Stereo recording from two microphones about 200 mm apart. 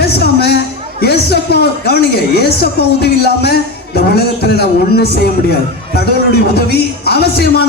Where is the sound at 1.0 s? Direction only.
55° left (ahead or behind).